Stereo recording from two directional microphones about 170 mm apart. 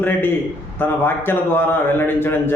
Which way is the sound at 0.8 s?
10° left (ahead or behind).